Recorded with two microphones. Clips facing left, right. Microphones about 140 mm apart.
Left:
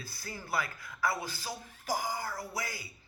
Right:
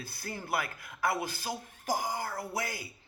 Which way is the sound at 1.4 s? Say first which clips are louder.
Right 4 dB; 50° right (ahead or behind).